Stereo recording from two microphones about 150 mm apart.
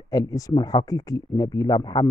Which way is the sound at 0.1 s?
25° left (ahead or behind).